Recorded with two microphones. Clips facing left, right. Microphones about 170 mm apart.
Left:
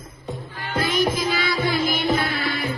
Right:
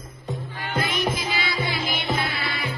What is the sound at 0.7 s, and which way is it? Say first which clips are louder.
Music: left 4 dB; 40° left (ahead or behind).